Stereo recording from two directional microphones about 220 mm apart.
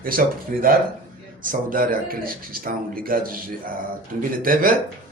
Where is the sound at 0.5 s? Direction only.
40° right (ahead or behind).